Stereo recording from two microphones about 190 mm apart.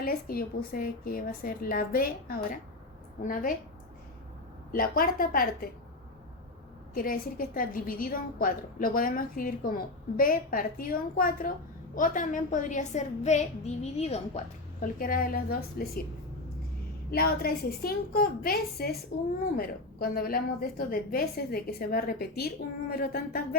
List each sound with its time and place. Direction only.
0.0 s a woman's voice: 50° left (ahead or behind)
4.7 s a woman's voice: 50° left (ahead or behind)
6.9 s a woman's voice: 50° left (ahead or behind)
17.1 s a woman's voice: 50° left (ahead or behind)